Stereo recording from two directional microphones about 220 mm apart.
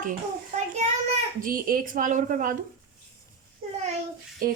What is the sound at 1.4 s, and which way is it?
A child's voice, 40° right (ahead or behind).